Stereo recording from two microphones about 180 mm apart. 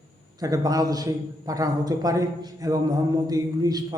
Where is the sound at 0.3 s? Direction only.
20° right (ahead or behind).